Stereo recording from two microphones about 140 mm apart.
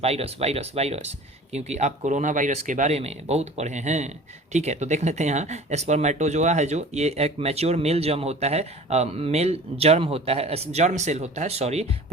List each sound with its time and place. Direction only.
0.0 s speech: 45° right (ahead or behind)